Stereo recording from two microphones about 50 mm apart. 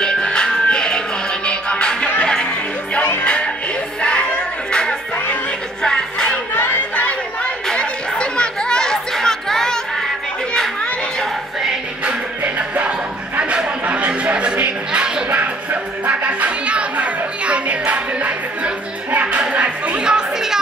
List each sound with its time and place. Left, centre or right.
0.0 s music: centre
3.2 s music: left
6.5 s chatter: left
7.7 s chatter: centre
10.5 s children playing: centre
12.0 s music: right
13.8 s a sound: right
15.3 s music: right
20.0 s music: centre